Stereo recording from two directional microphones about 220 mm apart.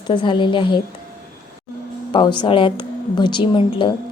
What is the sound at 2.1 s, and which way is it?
Speech, 20° left (ahead or behind).